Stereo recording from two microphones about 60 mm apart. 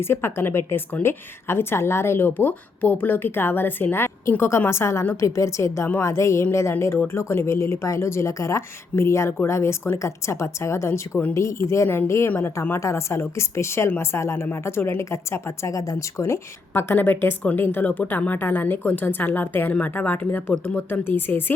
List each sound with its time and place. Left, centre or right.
0.0 s a woman's voice: left
11.9 s a woman's voice: left
12.8 s speech: left
15.7 s speech: left
16.7 s a woman's voice: left